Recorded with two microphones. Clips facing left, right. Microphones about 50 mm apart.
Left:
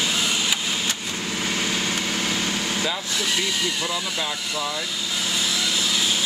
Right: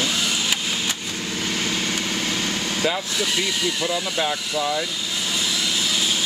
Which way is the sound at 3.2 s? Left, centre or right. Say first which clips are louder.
Right 1 dB; centre.